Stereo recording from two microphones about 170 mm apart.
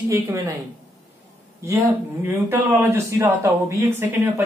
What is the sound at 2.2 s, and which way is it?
Speech, 15° right (ahead or behind).